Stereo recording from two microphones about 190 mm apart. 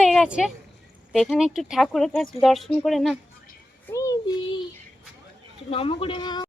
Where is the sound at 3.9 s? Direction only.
15° left (ahead or behind).